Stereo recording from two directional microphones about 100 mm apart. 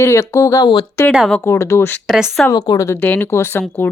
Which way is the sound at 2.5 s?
35° left (ahead or behind).